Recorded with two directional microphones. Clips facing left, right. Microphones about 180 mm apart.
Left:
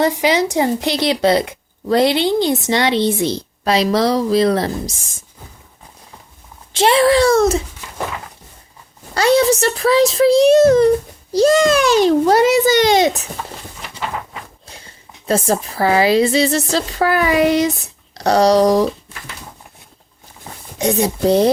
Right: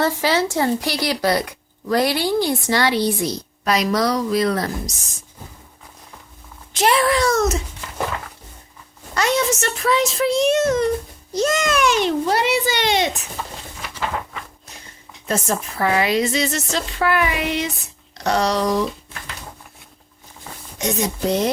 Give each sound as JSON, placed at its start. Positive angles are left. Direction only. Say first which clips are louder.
{"t": 0.0, "sound": "speech", "louder": "left 4 dB", "side_deg": 15}
{"t": 6.7, "sound": "speech", "louder": "left 5 dB", "side_deg": 30}
{"t": 9.1, "sound": "speech", "louder": "left 7 dB", "side_deg": 30}
{"t": 15.3, "sound": "speech", "louder": "left 5 dB", "side_deg": 30}
{"t": 20.7, "sound": "speech", "louder": "left 6 dB", "side_deg": 35}